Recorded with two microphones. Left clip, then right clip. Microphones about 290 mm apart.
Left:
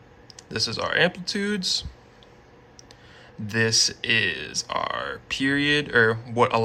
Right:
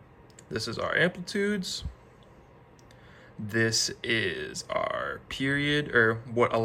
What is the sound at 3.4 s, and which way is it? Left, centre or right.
Speech, centre.